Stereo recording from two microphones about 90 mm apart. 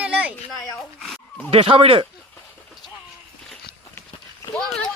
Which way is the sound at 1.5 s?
90° right.